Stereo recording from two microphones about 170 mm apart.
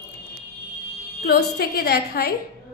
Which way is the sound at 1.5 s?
70° left (ahead or behind).